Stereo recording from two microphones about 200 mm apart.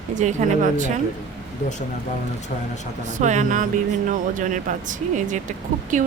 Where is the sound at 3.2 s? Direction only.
35° right (ahead or behind).